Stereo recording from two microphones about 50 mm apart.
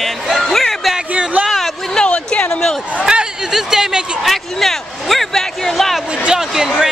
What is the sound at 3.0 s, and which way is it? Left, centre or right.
Speech, centre.